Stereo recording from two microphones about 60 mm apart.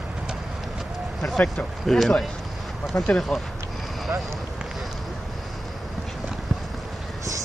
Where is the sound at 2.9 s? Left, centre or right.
Left.